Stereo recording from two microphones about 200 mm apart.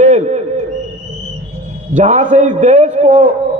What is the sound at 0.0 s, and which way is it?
Owl, 35° right (ahead or behind).